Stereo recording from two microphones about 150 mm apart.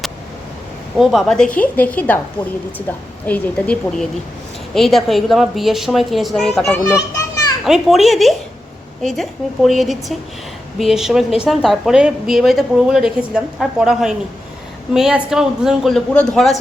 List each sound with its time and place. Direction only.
0.9 s a woman's voice: centre (ahead or behind)
3.2 s a woman's voice: 10° left (ahead or behind)
6.7 s children playing: 20° left (ahead or behind)
7.6 s a woman's voice: centre (ahead or behind)